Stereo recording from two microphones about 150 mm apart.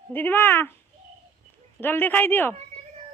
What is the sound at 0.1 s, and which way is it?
Speech, 15° left (ahead or behind).